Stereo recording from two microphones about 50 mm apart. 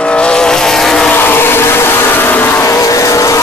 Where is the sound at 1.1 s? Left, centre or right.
Left.